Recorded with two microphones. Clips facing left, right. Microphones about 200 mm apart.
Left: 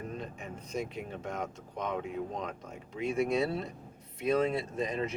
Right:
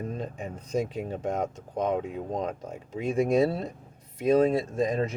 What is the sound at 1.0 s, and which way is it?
Speech, 40° right (ahead or behind).